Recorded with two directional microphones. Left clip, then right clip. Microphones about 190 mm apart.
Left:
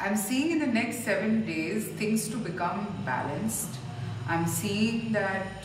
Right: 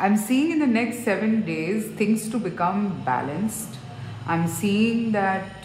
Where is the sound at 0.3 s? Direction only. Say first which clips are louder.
Right 6 dB; 35° right (ahead or behind).